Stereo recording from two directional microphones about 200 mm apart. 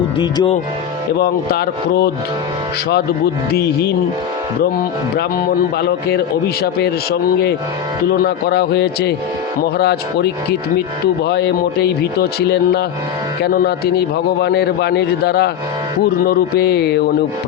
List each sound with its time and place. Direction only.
0.2 s speech: 20° left (ahead or behind)
1.2 s speech: 50° left (ahead or behind)
3.5 s speech: 50° left (ahead or behind)
5.7 s speech: 50° left (ahead or behind)